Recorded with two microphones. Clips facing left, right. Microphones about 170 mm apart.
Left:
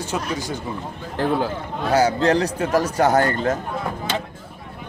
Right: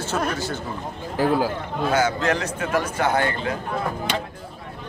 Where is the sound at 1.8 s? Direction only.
35° left (ahead or behind).